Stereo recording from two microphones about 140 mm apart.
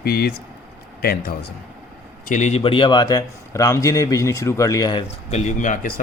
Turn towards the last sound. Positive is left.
turn(degrees=70)  # may be behind; listen again after turning